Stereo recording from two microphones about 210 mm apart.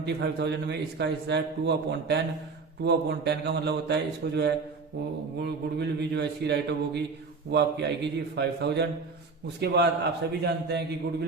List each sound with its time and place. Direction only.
0.0 s a man's voice: 55° right (ahead or behind)